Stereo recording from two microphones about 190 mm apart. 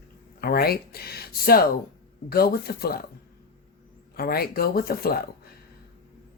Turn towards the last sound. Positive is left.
turn(degrees=55)  # may be behind; listen again after turning